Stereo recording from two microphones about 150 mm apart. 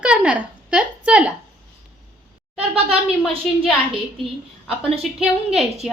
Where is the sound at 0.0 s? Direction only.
10° right (ahead or behind).